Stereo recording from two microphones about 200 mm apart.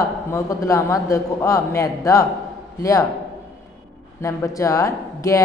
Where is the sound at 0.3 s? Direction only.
15° left (ahead or behind).